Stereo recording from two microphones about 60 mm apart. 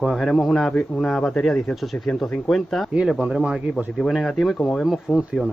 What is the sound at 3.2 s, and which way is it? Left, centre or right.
Speech, centre.